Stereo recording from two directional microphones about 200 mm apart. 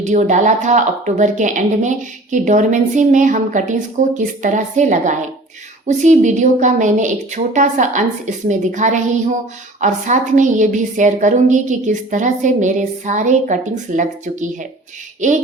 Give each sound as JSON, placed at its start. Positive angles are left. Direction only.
{"t": 0.0, "sound": "a woman's voice", "side_deg": -35}